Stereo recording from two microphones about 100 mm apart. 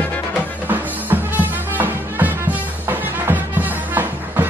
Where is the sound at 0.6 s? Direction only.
20° right (ahead or behind).